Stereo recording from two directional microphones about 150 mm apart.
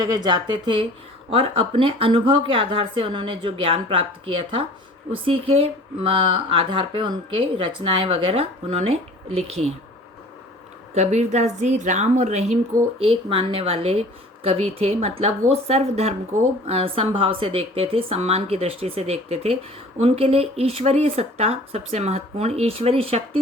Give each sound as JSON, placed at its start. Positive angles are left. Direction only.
{"t": 0.0, "sound": "a woman's voice", "side_deg": -25}
{"t": 10.9, "sound": "speech", "side_deg": -45}
{"t": 13.0, "sound": "a woman's voice", "side_deg": -35}